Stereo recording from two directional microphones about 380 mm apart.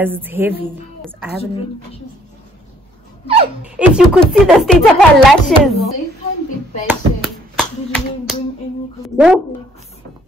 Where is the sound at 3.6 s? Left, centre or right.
Centre.